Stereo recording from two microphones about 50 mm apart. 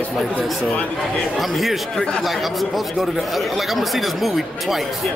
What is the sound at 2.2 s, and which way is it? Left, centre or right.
Speech, centre.